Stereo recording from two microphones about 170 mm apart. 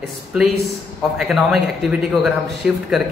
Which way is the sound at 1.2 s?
Centre (ahead or behind).